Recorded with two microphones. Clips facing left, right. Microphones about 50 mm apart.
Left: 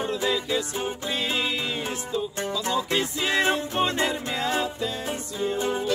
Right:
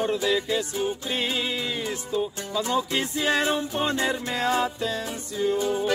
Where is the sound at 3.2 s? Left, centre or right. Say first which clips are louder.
Right 1 dB; left.